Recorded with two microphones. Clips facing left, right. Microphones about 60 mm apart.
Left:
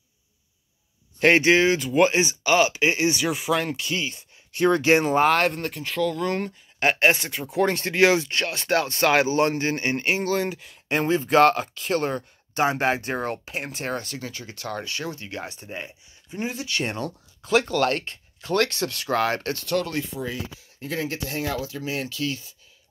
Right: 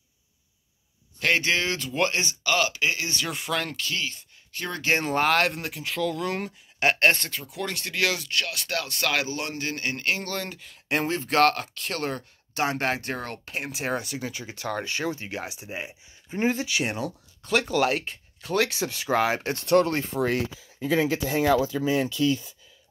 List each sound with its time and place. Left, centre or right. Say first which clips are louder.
1.2 s speech: left 7 dB; left
5.0 s speech: left 3 dB; centre
7.3 s speech: left 9 dB; left
10.2 s speech: left 8 dB; centre
13.6 s speech: right 5 dB; centre; by 15.4 s right
15.4 s speech: even; centre
16.3 s speech: right 5 dB; right
16.8 s speech: even; centre
17.6 s speech: left 1 dB; centre
19.5 s speech: right 4 dB; right
20.2 s speech: right 6 dB; right